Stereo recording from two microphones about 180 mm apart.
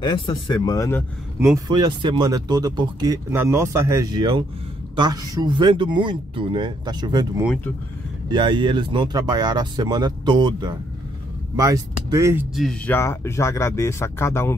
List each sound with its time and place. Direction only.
0.0 s speech: 25° left (ahead or behind)
1.4 s speech: 20° right (ahead or behind)
12.5 s speech: centre (ahead or behind)
12.9 s speech: 15° left (ahead or behind)